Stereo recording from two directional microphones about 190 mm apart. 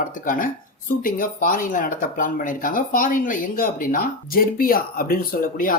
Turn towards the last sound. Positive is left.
turn(degrees=50)  # may be behind; listen again after turning